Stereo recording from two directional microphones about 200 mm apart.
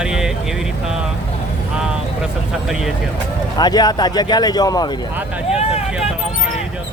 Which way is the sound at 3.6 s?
20° left (ahead or behind).